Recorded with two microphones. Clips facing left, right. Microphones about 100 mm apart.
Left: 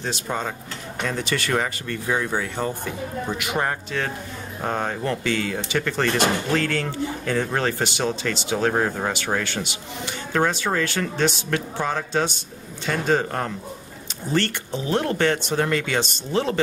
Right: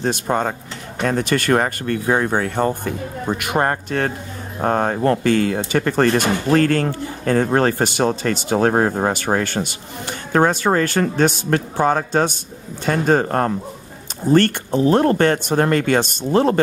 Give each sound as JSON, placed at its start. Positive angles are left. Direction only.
{"t": 0.0, "sound": "speech", "side_deg": -50}